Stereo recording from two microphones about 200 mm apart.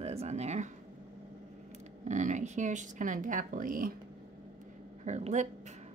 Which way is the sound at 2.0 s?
35° right (ahead or behind).